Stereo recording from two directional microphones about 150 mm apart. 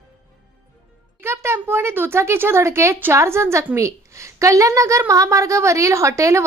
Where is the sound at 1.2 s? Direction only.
15° right (ahead or behind).